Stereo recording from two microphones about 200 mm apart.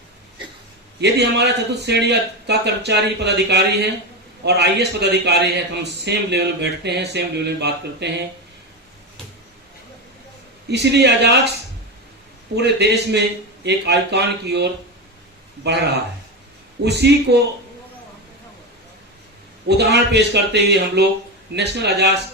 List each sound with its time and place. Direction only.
1.0 s a man's voice: 55° right (ahead or behind)
10.7 s a man's voice: 60° right (ahead or behind)
12.5 s a man's voice: 55° right (ahead or behind)
19.6 s a man's voice: 55° right (ahead or behind)